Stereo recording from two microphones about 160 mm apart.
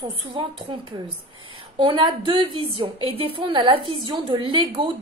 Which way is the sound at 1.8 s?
30° right (ahead or behind).